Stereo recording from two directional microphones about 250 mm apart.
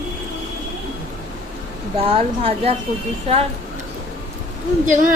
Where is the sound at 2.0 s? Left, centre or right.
Right.